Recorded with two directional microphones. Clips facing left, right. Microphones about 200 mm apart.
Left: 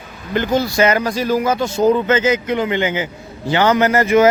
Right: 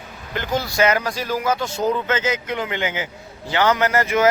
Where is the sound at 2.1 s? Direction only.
Centre (ahead or behind).